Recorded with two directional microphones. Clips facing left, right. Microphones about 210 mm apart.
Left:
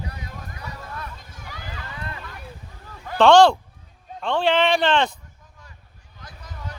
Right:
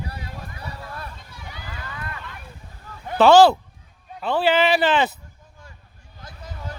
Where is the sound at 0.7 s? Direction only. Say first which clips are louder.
Left 2 dB; 30° right (ahead or behind).